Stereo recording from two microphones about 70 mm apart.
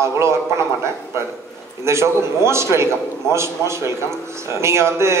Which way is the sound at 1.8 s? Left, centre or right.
Right.